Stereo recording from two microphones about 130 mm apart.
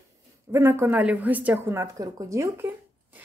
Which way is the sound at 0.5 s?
20° right (ahead or behind).